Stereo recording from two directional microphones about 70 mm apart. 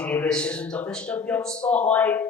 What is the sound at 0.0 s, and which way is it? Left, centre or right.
Speech, centre.